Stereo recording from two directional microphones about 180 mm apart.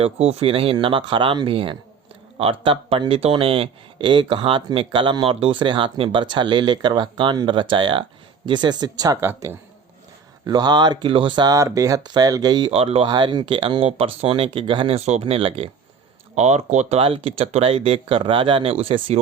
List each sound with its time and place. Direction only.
0.0 s speech: 35° right (ahead or behind)